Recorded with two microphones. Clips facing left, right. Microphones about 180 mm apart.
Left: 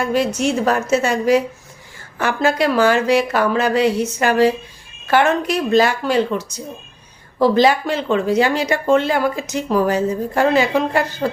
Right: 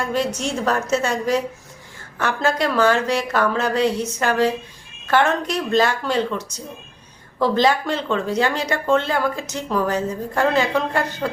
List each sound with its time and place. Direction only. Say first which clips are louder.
0.0 s a woman's voice: left 5 dB; 10° left (ahead or behind)